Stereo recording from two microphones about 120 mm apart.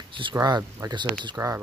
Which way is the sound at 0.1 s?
40° right (ahead or behind).